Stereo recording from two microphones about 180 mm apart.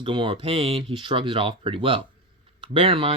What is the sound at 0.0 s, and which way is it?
Speech, 30° right (ahead or behind).